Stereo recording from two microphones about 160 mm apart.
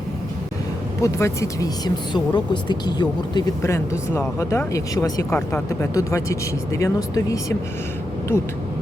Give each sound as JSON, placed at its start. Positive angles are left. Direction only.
{"t": 1.0, "sound": "speech", "side_deg": 20}